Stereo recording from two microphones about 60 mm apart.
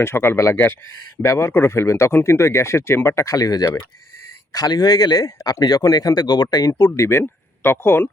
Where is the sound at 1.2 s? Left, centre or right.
Left.